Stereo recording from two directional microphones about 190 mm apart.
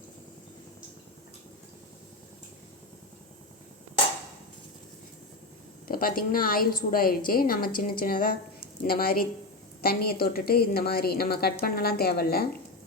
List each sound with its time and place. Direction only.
5.9 s a woman's voice: 50° left (ahead or behind)